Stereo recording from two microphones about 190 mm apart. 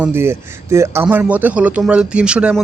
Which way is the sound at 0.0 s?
10° right (ahead or behind).